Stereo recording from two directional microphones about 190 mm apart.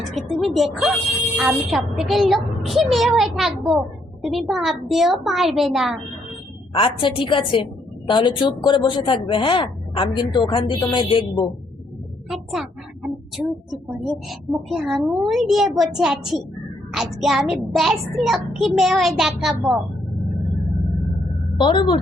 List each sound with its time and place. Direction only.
0.1 s speech: centre (ahead or behind)
6.7 s a woman's voice: 25° left (ahead or behind)
12.3 s speech: centre (ahead or behind)
21.6 s a woman's voice: 25° left (ahead or behind)